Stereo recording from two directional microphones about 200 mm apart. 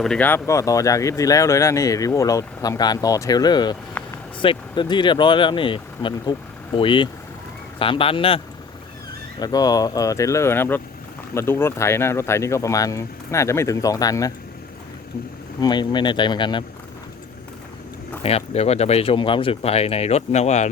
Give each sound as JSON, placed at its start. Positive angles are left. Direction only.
{"t": 0.0, "sound": "speech", "side_deg": 5}
{"t": 9.4, "sound": "speech", "side_deg": 20}
{"t": 15.6, "sound": "speech", "side_deg": 20}
{"t": 18.2, "sound": "speech", "side_deg": 30}